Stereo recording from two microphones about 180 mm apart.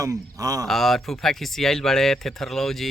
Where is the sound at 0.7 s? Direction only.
Centre (ahead or behind).